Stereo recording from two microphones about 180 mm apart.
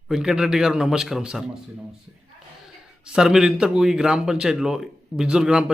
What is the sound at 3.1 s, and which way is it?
A man's voice, 5° right (ahead or behind).